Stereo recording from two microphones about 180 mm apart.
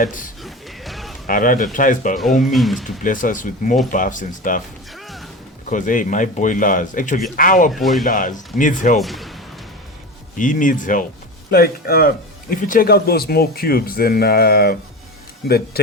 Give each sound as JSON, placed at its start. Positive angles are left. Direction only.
{"t": 0.0, "sound": "speech", "side_deg": 50}
{"t": 0.4, "sound": "music", "side_deg": 0}
{"t": 1.3, "sound": "speech", "side_deg": 50}
{"t": 2.4, "sound": "speech", "side_deg": 0}
{"t": 2.8, "sound": "speech", "side_deg": 45}
{"t": 5.6, "sound": "speech", "side_deg": 45}
{"t": 7.7, "sound": "speech", "side_deg": 0}
{"t": 8.0, "sound": "speech", "side_deg": 50}
{"t": 9.0, "sound": "speech", "side_deg": 0}
{"t": 10.3, "sound": "speech", "side_deg": 45}